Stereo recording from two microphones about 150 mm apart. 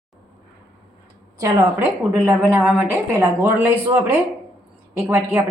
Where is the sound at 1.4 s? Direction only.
20° right (ahead or behind).